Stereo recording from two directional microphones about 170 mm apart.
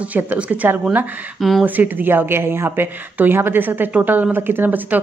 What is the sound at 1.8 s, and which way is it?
A woman's voice, 10° right (ahead or behind).